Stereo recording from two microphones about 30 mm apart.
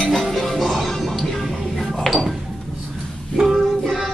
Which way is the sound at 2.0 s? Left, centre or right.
Centre.